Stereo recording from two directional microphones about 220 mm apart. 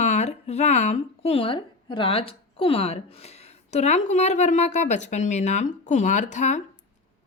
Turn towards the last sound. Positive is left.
turn(degrees=35)  # may be behind; listen again after turning